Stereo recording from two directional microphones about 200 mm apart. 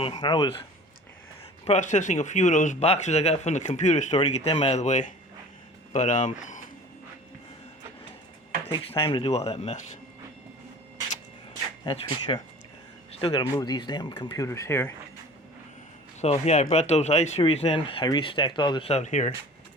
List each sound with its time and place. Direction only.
0.0 s speech: 25° left (ahead or behind)
1.6 s speech: 35° left (ahead or behind)
8.7 s speech: 25° left (ahead or behind)
11.9 s speech: 25° left (ahead or behind)
16.2 s speech: 35° left (ahead or behind)